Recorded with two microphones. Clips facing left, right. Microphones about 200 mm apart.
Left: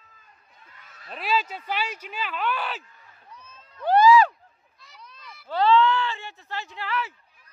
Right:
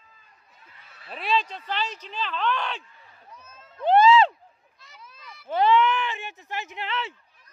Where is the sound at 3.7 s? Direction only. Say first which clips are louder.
Even; 25° right (ahead or behind).